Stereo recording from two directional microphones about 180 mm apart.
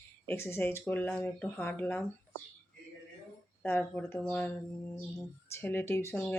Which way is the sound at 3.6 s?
15° left (ahead or behind).